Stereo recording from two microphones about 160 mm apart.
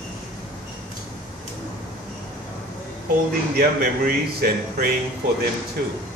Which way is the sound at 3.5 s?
70° right (ahead or behind).